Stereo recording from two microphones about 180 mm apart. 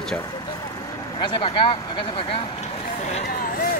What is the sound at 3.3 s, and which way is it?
Vehicle, 50° left (ahead or behind).